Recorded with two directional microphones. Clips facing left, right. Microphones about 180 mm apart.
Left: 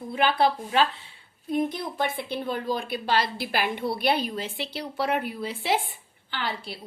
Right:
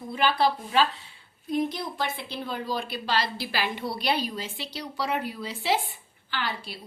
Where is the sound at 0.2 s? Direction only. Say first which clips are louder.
Left 1 dB; 55° left (ahead or behind).